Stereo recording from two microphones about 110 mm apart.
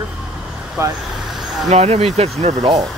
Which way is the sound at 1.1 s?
5° right (ahead or behind).